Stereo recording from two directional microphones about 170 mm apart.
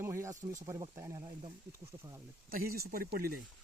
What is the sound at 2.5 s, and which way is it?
Speech, 60° right (ahead or behind).